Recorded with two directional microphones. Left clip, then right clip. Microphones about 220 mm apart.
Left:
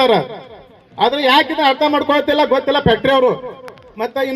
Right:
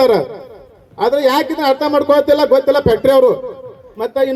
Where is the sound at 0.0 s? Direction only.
25° left (ahead or behind).